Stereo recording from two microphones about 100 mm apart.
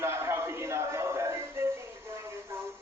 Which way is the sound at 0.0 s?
25° right (ahead or behind).